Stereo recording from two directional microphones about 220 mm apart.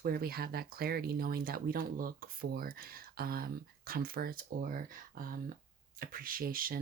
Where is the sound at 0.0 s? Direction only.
45° right (ahead or behind).